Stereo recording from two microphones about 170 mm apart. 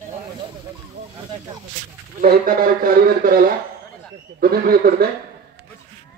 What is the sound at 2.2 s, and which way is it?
Speech, 60° right (ahead or behind).